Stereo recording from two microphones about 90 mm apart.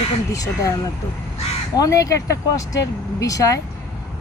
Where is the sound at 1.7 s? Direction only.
40° left (ahead or behind).